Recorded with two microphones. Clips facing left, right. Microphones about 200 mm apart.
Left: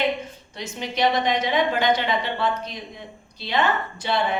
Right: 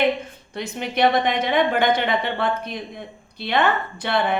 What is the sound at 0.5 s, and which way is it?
A woman's voice, 55° right (ahead or behind).